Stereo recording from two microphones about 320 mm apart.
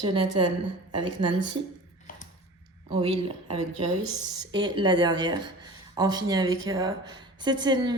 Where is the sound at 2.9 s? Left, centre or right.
Centre.